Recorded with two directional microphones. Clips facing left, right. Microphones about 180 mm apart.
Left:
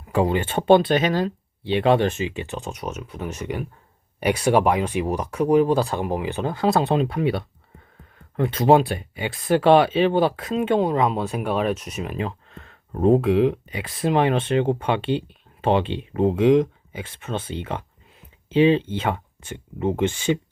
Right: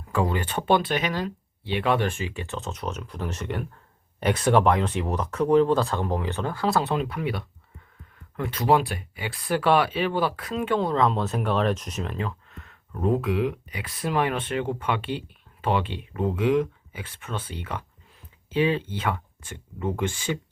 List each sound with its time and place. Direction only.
0.1 s speech: 20° left (ahead or behind)
12.2 s speech: 30° left (ahead or behind)